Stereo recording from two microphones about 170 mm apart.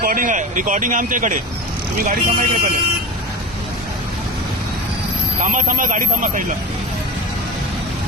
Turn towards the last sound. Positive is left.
turn(degrees=-50)  # may be behind; listen again after turning